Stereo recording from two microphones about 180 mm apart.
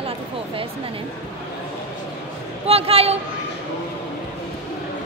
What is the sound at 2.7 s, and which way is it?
Speech, 35° right (ahead or behind).